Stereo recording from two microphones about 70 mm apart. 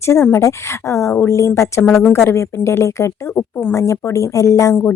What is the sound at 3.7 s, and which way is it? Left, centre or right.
Speech, left.